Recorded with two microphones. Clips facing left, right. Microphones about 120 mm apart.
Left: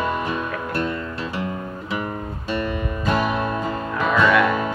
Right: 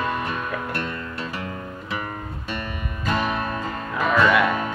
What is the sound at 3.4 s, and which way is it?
Music, 20° left (ahead or behind).